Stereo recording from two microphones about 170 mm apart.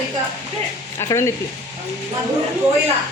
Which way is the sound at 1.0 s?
15° left (ahead or behind).